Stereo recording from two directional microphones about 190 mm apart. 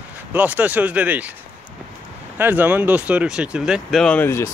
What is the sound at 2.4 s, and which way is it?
Speech, 10° right (ahead or behind).